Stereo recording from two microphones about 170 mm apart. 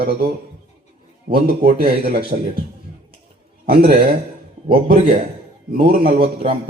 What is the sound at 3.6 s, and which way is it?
Speech, 65° right (ahead or behind).